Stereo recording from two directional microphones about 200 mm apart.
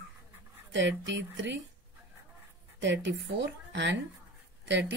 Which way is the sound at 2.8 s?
65° right (ahead or behind).